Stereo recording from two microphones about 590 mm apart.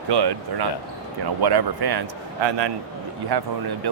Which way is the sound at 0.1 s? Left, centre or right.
Right.